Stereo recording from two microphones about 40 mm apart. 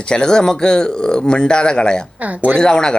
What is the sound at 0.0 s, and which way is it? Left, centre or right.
Speech, left.